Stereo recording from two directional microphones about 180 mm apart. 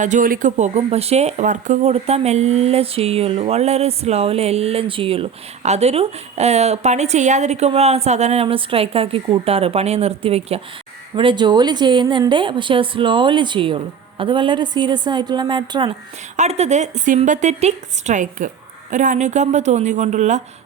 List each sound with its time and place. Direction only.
0.0 s speech: 45° right (ahead or behind); by 15.9 s 25° right (ahead or behind)
16.4 s speech: 40° right (ahead or behind)